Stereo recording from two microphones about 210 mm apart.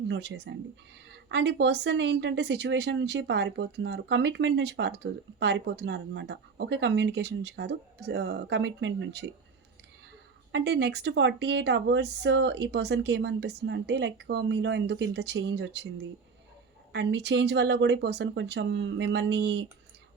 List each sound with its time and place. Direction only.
0.1 s speech: 55° right (ahead or behind)
10.5 s speech: 55° right (ahead or behind)